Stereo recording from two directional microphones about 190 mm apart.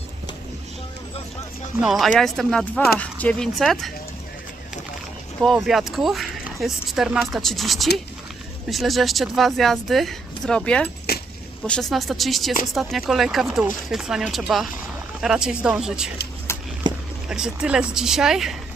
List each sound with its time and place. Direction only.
1.8 s speech: centre (ahead or behind)
5.6 s speech: centre (ahead or behind)
11.1 s a sound: 55° left (ahead or behind)
11.6 s speech: 5° left (ahead or behind)
16.5 s vehicle: 15° left (ahead or behind)
16.9 s a sound: 25° right (ahead or behind)
17.2 s speech: 5° right (ahead or behind)